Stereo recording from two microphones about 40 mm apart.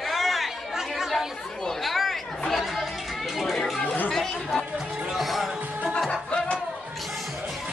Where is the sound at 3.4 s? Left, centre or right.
Centre.